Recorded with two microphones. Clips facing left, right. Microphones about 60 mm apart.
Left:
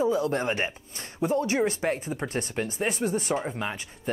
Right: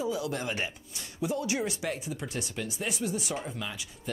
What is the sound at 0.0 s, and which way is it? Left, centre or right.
Speech, left.